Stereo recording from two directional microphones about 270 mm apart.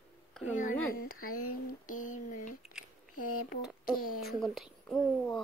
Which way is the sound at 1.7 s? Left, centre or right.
Left.